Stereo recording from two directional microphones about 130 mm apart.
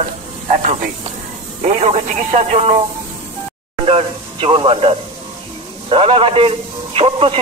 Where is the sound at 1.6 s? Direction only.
55° right (ahead or behind).